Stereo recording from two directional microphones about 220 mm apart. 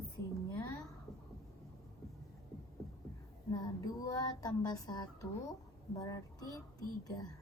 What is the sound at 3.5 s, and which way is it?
A woman's voice, 15° left (ahead or behind).